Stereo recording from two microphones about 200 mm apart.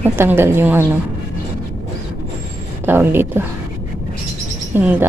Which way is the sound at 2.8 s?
10° right (ahead or behind).